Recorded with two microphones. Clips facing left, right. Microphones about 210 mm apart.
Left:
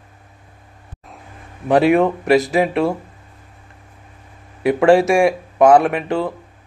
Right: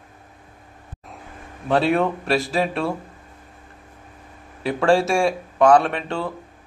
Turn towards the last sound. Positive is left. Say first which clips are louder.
# left 6 dB
turn(degrees=15)  # may be behind; listen again after turning